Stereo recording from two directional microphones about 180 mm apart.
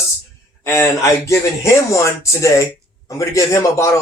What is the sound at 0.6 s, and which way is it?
A man's voice, 15° left (ahead or behind).